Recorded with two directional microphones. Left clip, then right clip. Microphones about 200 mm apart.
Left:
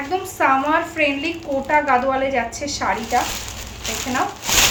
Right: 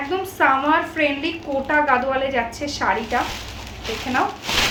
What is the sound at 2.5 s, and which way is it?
Speech, 10° right (ahead or behind).